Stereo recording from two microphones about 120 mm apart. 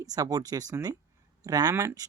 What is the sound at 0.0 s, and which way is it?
Speech, 30° right (ahead or behind).